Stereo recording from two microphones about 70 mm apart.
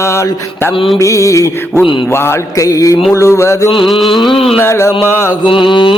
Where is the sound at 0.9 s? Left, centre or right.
Left.